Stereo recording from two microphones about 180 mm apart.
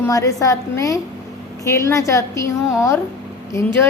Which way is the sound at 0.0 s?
15° left (ahead or behind).